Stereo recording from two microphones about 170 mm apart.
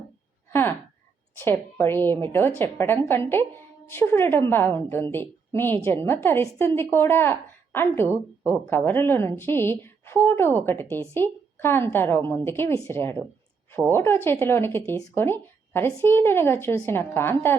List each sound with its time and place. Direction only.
1.4 s a woman's voice: 15° left (ahead or behind)
8.0 s speech: 15° right (ahead or behind)
8.6 s a woman's voice: 15° left (ahead or behind)